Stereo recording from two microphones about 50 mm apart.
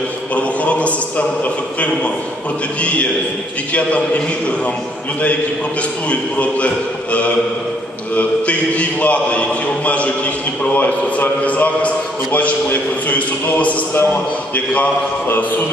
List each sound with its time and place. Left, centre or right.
0.3 s a man's voice: left
5.8 s a man's voice: left
15.2 s mantra: left